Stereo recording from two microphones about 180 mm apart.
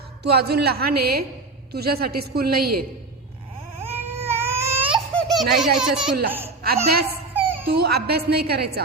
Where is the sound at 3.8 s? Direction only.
10° right (ahead or behind).